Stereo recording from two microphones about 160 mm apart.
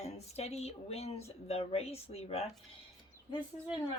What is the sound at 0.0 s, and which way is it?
Speech, 40° left (ahead or behind).